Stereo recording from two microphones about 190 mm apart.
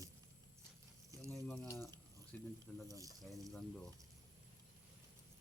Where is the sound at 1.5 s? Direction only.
15° left (ahead or behind).